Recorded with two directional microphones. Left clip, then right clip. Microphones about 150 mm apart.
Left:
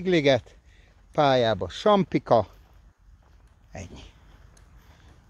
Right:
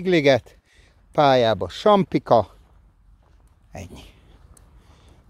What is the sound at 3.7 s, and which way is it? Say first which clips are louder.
Speech: right 3 dB; 35° right (ahead or behind).